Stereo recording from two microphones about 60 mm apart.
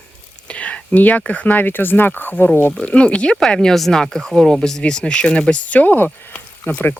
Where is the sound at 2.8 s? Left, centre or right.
Centre.